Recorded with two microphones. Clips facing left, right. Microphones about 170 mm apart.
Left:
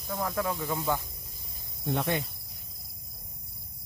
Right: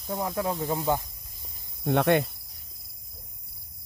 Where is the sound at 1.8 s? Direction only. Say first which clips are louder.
Right 7 dB; 65° right (ahead or behind).